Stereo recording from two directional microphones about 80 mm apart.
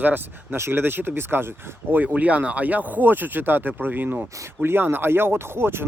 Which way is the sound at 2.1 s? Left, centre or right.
Centre.